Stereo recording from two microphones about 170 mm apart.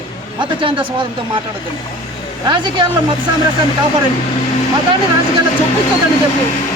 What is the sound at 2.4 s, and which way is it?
Speech, 30° right (ahead or behind).